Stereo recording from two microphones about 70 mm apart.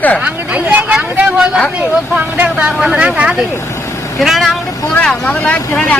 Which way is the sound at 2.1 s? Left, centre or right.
Right.